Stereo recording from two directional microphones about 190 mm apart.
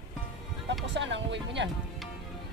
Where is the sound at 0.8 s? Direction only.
70° right (ahead or behind).